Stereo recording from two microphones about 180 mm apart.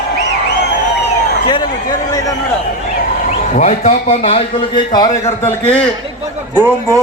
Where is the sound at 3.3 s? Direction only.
40° left (ahead or behind); by 5.1 s 25° left (ahead or behind).